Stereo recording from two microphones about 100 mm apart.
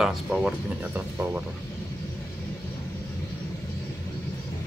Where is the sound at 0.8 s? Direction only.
15° right (ahead or behind).